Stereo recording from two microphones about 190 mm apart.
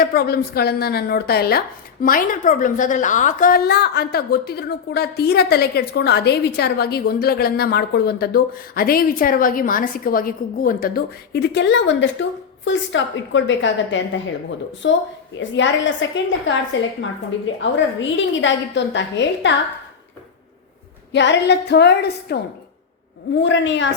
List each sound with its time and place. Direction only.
0.0 s speech: 50° left (ahead or behind)
3.7 s a woman's voice: 60° left (ahead or behind); by 16.6 s 75° left (ahead or behind)
17.6 s a woman's voice: 75° left (ahead or behind)
21.1 s a woman's voice: 70° left (ahead or behind)
23.4 s a woman's voice: 75° left (ahead or behind)